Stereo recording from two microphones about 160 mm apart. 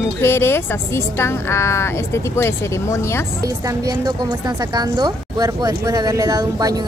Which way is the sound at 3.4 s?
20° right (ahead or behind).